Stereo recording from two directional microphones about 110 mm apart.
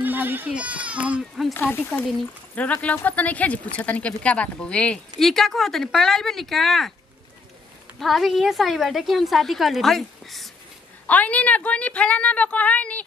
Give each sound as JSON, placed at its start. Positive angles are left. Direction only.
{"t": 0.0, "sound": "speech", "side_deg": -15}
{"t": 1.5, "sound": "speech", "side_deg": 20}
{"t": 8.0, "sound": "a woman's voice", "side_deg": 0}
{"t": 11.1, "sound": "speech", "side_deg": 15}